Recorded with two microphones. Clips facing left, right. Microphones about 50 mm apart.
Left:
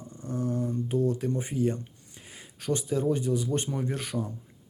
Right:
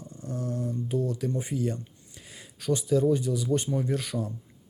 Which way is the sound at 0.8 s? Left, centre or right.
Left.